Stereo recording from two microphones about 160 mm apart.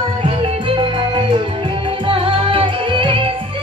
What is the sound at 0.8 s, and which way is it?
Music, 30° right (ahead or behind).